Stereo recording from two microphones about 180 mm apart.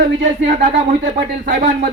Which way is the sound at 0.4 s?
45° right (ahead or behind).